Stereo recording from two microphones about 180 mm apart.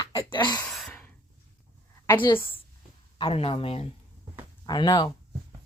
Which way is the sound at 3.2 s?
30° left (ahead or behind).